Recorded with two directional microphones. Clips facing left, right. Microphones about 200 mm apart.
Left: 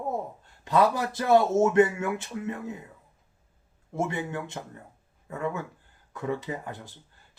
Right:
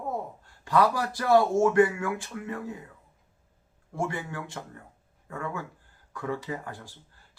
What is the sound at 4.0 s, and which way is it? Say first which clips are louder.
Speech: left 2 dB; 20° left (ahead or behind).